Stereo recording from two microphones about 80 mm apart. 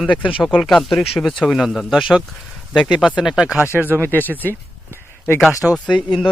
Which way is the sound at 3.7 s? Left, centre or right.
Right.